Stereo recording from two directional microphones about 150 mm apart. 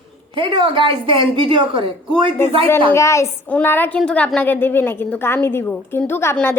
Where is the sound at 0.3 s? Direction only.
35° right (ahead or behind).